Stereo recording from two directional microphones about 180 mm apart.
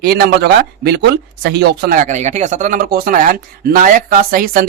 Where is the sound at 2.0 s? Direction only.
40° right (ahead or behind).